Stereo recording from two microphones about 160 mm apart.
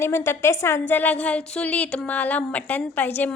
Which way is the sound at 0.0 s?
15° left (ahead or behind).